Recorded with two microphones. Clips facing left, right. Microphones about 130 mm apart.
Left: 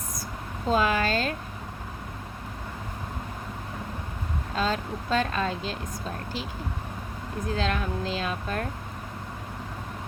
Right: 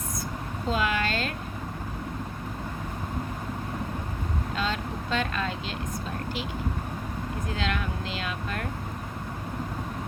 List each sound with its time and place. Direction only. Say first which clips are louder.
0.7 s speech: left 4 dB; 40° left (ahead or behind)
4.5 s speech: left 4 dB; 40° left (ahead or behind)
7.5 s speech: left 4 dB; 35° left (ahead or behind)